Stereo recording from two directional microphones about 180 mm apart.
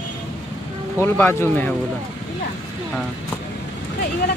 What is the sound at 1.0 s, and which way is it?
Speech, 15° left (ahead or behind).